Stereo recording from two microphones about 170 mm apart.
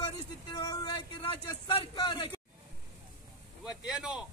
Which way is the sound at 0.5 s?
25° left (ahead or behind).